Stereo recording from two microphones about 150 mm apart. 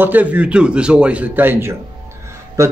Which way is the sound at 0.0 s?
10° right (ahead or behind).